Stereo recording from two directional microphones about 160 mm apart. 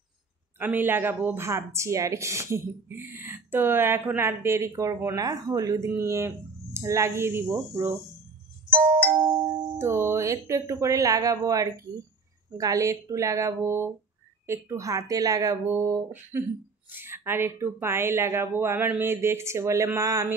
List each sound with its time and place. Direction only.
0.6 s speech: 10° right (ahead or behind)
9.8 s speech: 15° right (ahead or behind)